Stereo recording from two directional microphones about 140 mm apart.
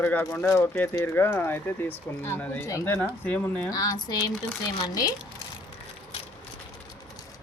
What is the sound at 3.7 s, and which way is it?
Speech, 25° left (ahead or behind).